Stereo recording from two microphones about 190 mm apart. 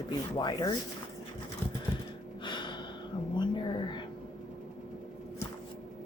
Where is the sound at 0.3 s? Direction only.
20° left (ahead or behind).